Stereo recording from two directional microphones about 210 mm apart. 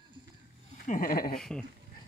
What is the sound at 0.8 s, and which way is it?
Speech, 40° left (ahead or behind).